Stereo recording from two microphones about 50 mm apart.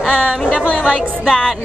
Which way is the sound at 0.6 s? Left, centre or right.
Centre.